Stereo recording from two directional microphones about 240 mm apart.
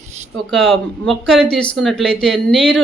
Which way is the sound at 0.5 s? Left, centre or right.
Centre.